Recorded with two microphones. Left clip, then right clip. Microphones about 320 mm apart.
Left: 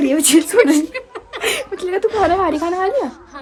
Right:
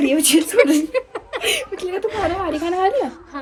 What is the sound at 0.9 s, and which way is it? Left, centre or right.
Chuckle, centre.